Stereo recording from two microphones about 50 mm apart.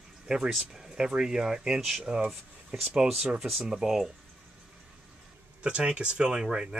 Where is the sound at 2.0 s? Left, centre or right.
Centre.